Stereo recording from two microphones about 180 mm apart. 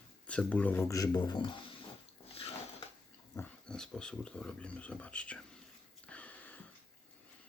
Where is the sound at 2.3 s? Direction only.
30° left (ahead or behind).